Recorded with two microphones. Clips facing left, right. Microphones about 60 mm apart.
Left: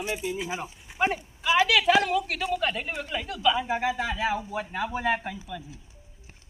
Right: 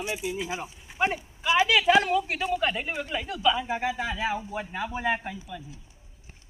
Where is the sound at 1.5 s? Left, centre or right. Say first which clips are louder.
Even; centre.